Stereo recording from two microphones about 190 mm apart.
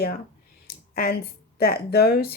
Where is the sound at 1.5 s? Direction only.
55° left (ahead or behind).